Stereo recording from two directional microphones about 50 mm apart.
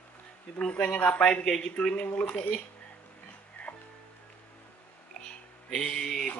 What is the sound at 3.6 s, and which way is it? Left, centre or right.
Music, left.